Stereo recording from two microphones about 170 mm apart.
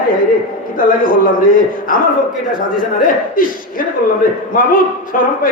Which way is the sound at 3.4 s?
55° left (ahead or behind).